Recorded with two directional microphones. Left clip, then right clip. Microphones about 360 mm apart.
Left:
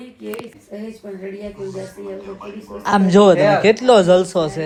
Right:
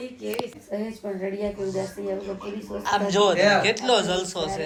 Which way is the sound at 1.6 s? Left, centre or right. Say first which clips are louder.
Even; centre.